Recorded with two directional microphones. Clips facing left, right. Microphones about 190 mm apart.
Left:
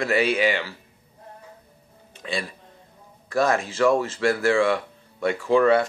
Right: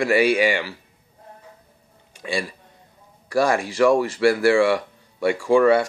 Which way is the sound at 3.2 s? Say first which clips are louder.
Right 2 dB; 10° right (ahead or behind).